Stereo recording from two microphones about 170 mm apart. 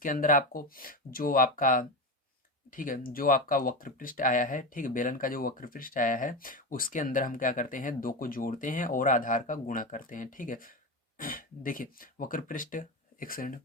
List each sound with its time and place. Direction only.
0.0 s speech: 55° left (ahead or behind)